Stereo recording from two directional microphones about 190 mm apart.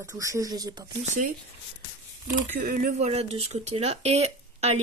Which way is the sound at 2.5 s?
45° right (ahead or behind).